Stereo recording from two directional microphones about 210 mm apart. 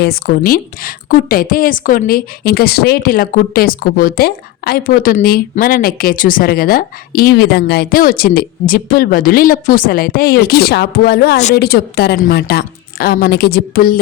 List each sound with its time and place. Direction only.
0.0 s a woman's voice: 45° left (ahead or behind)